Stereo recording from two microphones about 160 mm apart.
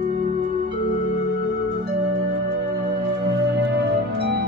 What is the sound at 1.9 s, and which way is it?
Music, 90° right.